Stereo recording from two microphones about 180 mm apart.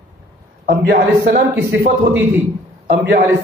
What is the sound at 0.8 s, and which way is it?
A man's voice, 55° right (ahead or behind).